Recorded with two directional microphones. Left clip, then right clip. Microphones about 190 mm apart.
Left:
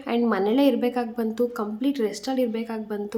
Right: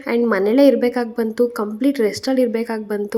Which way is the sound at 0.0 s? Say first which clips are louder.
Right 6 dB; 20° right (ahead or behind).